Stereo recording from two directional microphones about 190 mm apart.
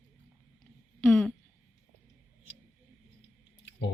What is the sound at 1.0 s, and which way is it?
Speech, 10° left (ahead or behind).